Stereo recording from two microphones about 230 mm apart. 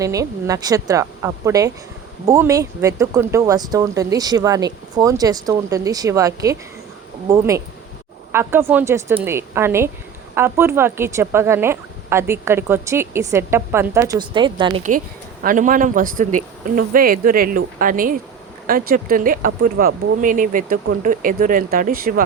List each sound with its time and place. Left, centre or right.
0.0 s speech: centre
14.9 s a man's voice: right